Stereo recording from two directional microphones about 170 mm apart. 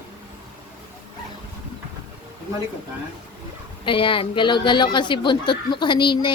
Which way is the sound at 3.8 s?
30° left (ahead or behind).